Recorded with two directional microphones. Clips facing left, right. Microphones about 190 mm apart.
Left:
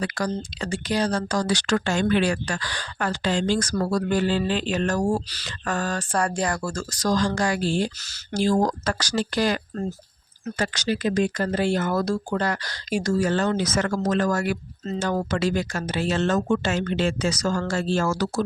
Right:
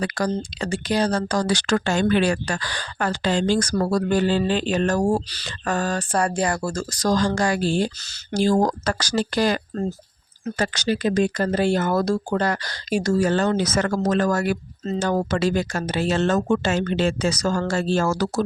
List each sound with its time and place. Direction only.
0.0 s speech: 40° right (ahead or behind)
1.1 s speech: 55° right (ahead or behind); by 6.1 s 25° right (ahead or behind)
6.1 s speech: 15° right (ahead or behind)
6.6 s speech: 15° right (ahead or behind)
7.0 s speech: 45° right (ahead or behind)